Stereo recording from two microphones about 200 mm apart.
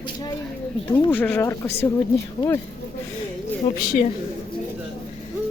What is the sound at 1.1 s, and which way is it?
Speech, 10° left (ahead or behind).